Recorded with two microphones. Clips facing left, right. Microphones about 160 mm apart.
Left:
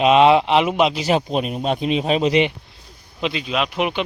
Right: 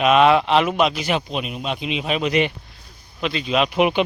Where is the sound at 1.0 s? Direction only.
40° left (ahead or behind); by 3.4 s 20° left (ahead or behind).